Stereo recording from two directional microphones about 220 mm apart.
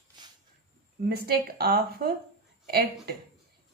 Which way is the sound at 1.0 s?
45° right (ahead or behind).